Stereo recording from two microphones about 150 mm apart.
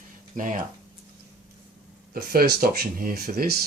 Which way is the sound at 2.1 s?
80° right.